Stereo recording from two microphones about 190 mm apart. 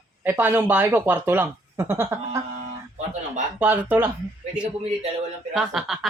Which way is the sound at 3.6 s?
10° right (ahead or behind).